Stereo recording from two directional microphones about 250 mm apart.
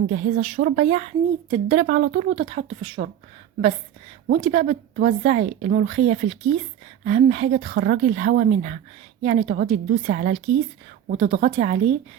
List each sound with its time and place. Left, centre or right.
0.1 s speech: right
4.3 s speech: right
11.4 s speech: right